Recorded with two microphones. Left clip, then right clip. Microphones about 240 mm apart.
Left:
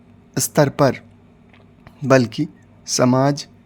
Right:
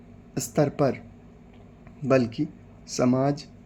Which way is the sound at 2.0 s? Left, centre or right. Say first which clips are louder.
Left 7 dB; left.